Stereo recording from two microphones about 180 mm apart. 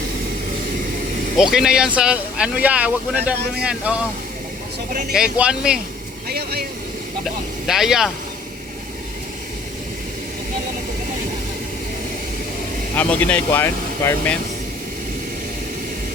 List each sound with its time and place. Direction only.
1.4 s speech: 5° right (ahead or behind)
4.9 s speech: 50° right (ahead or behind)
5.1 s speech: 5° right (ahead or behind)
6.2 s speech: 60° right (ahead or behind)
7.7 s speech: centre (ahead or behind)
13.0 s speech: 10° left (ahead or behind)